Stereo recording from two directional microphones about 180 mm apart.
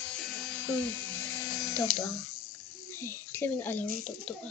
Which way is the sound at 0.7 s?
10° left (ahead or behind).